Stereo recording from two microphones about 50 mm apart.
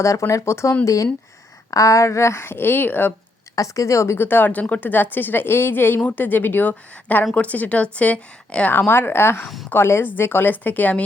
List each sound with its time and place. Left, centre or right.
0.0 s speech: left
0.9 s a woman's voice: left
3.8 s speech: left
4.2 s a woman's voice: left
8.9 s a woman's voice: left